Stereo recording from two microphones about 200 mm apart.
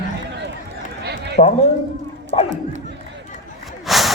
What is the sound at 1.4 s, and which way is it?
Speech, 35° left (ahead or behind).